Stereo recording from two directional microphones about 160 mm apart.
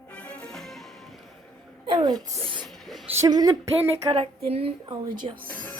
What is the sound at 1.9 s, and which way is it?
Speech, 30° right (ahead or behind).